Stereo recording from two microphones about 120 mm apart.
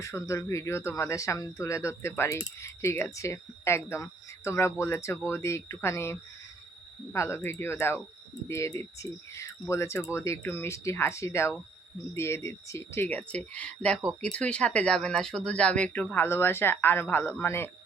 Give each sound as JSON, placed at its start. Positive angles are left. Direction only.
{"t": 0.0, "sound": "speech", "side_deg": 25}